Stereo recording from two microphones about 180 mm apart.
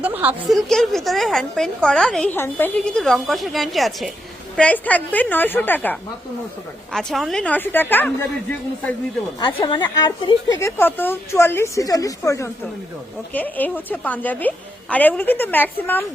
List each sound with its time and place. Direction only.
0.0 s a woman's voice: 10° right (ahead or behind); by 9.0 s 10° left (ahead or behind)
9.4 s a woman's voice: 30° left (ahead or behind); by 16.0 s 10° left (ahead or behind)